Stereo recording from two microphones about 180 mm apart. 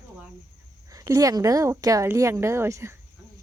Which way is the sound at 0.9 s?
20° right (ahead or behind).